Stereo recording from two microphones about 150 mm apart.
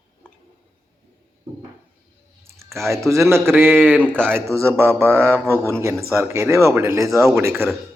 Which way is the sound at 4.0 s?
10° left (ahead or behind).